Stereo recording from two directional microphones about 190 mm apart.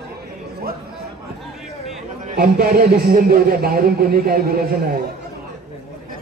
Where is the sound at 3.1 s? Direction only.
55° right (ahead or behind).